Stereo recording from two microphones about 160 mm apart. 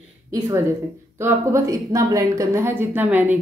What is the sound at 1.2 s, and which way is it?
A woman's voice, 15° right (ahead or behind).